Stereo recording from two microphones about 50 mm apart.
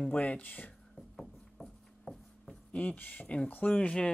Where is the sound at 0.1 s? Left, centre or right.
Left.